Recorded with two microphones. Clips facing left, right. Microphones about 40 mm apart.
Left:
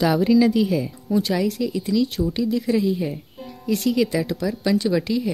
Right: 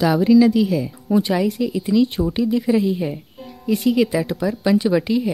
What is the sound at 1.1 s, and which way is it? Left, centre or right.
Speech, centre.